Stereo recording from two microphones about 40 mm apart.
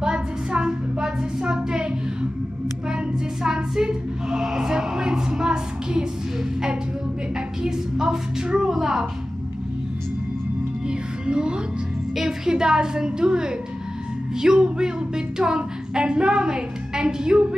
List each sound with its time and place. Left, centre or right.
0.0 s a sound: right
3.4 s speech: centre
7.6 s a sound: centre
8.7 s a woman's voice: centre
10.9 s music: right
12.2 s a woman's voice: centre